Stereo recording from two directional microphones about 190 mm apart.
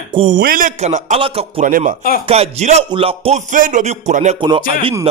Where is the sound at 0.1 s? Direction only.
30° right (ahead or behind).